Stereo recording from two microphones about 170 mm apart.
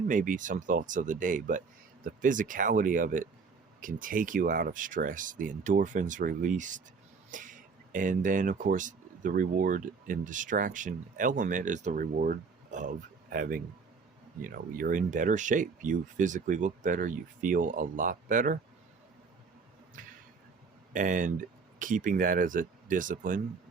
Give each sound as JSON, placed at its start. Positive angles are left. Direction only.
{"t": 0.1, "sound": "speech", "side_deg": -50}
{"t": 20.0, "sound": "a sound", "side_deg": -50}
{"t": 20.9, "sound": "speech", "side_deg": -50}